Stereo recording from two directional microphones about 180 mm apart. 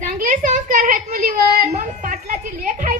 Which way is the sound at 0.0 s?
45° right (ahead or behind).